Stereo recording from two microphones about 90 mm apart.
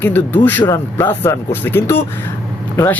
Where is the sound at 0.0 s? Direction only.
20° left (ahead or behind).